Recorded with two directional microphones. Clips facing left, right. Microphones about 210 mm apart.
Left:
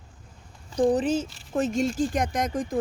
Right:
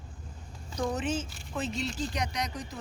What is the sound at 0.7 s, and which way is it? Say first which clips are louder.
Speech: left 9 dB; 30° left (ahead or behind).